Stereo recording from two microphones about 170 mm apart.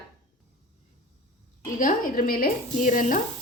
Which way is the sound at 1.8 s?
55° left (ahead or behind).